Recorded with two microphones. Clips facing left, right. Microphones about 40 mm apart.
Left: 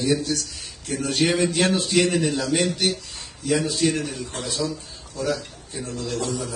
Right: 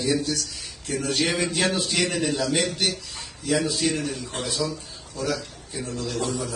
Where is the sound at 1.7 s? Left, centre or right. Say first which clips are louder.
Left 5 dB; centre.